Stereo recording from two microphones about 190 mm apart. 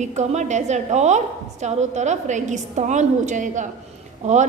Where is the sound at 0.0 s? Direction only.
35° right (ahead or behind).